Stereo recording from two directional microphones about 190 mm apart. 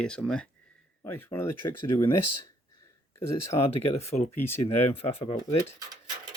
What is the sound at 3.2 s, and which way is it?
Speech, 15° left (ahead or behind).